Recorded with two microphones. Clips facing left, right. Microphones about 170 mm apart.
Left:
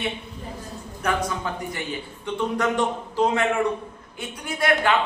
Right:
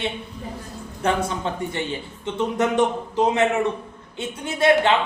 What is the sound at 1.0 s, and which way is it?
A man's voice, 25° right (ahead or behind).